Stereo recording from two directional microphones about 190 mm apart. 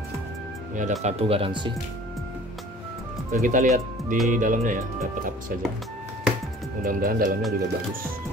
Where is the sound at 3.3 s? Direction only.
45° right (ahead or behind).